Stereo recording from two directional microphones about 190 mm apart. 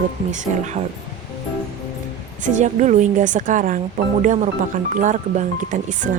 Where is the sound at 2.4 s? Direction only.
40° right (ahead or behind).